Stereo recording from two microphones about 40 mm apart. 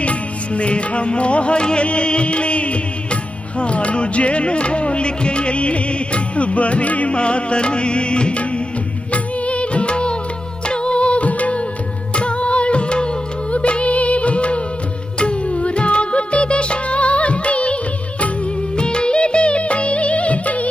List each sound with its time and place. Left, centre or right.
0.0 s music: left
18.8 s music: left